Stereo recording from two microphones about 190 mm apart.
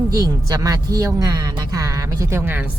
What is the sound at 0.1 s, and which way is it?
Speech, 20° right (ahead or behind).